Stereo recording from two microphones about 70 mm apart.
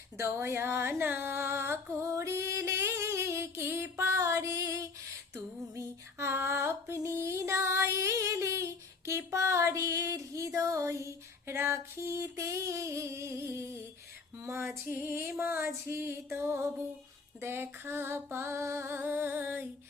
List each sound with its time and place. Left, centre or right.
0.2 s a sound: right
5.3 s female singing: right
11.4 s female singing: right
14.3 s music: right
14.8 s female singing: right